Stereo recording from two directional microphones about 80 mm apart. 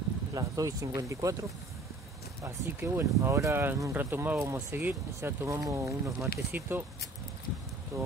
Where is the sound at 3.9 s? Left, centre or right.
Right.